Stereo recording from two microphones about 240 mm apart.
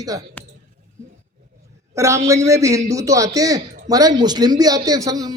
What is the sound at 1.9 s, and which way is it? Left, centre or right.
A man's voice, centre.